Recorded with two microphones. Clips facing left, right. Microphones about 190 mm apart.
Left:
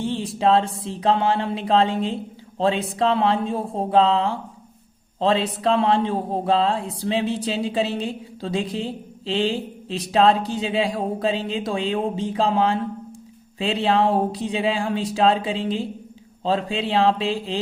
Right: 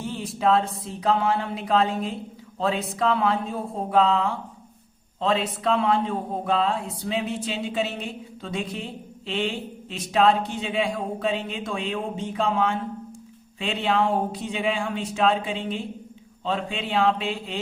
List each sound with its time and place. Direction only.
0.0 s speech: 30° left (ahead or behind)